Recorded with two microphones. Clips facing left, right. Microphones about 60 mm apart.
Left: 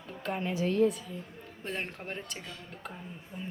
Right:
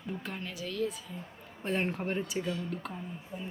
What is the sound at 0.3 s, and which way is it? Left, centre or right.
Speech, left.